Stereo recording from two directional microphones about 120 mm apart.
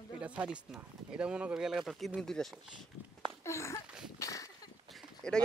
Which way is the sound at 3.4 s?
25° left (ahead or behind).